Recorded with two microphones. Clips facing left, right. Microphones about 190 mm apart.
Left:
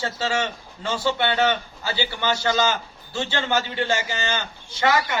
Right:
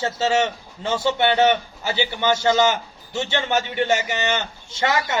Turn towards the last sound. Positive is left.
turn(degrees=-25)  # may be behind; listen again after turning